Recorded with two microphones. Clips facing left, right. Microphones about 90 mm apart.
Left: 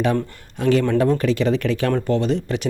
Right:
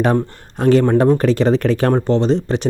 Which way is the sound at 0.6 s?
40° right (ahead or behind).